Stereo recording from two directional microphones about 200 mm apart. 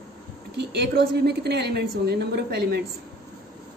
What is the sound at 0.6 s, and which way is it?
A woman's voice, 55° right (ahead or behind).